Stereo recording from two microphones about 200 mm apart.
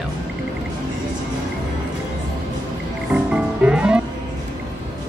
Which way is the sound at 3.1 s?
5° right (ahead or behind).